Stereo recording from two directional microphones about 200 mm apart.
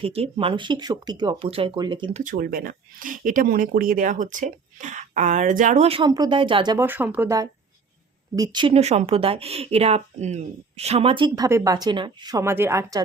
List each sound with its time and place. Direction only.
0.0 s speech: 30° right (ahead or behind)
2.2 s speech: 45° right (ahead or behind)
6.1 s speech: 20° right (ahead or behind)
6.8 s a woman's voice: 10° right (ahead or behind)
8.4 s a woman's voice: 25° right (ahead or behind)